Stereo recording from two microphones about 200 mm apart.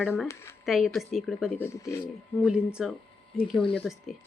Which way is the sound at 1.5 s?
10° left (ahead or behind).